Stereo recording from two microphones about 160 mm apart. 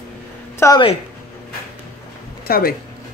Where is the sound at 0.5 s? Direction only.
20° left (ahead or behind).